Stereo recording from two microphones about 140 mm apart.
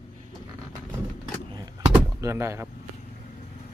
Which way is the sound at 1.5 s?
25° right (ahead or behind).